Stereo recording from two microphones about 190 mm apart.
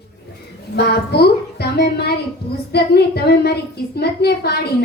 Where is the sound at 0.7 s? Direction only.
60° left (ahead or behind).